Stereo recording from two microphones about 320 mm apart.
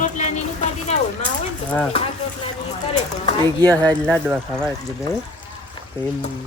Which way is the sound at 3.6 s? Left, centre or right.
Centre.